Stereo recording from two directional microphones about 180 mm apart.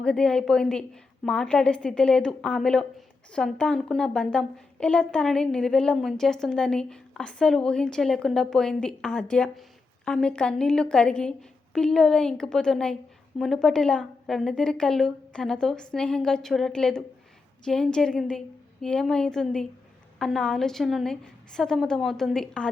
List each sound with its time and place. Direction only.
0.0 s a woman's voice: 5° left (ahead or behind)